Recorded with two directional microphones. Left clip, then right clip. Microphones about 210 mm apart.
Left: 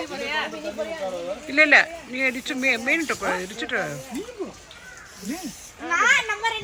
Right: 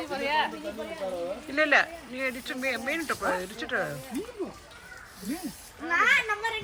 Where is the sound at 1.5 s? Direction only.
5° right (ahead or behind).